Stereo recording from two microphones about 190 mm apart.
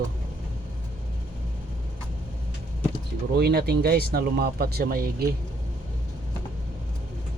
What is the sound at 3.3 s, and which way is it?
Speech, 55° right (ahead or behind).